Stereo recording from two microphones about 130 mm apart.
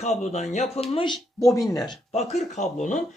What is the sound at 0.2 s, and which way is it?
Speech, 60° left (ahead or behind).